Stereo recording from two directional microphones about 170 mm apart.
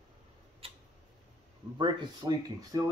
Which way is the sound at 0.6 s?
35° right (ahead or behind).